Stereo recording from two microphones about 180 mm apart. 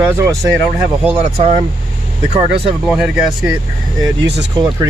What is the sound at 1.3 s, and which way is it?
Speech, 35° right (ahead or behind).